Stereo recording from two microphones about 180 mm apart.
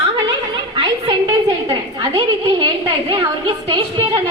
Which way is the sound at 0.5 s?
25° right (ahead or behind).